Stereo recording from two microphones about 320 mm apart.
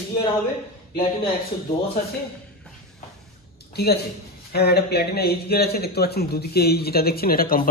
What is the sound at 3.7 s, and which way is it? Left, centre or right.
Speech, left.